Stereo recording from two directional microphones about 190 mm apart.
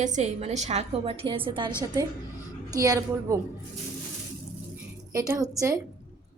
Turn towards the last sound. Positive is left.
turn(degrees=-15)  # may be behind; listen again after turning